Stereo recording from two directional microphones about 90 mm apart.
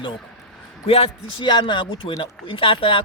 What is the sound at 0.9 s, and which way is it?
Speech, 90° left.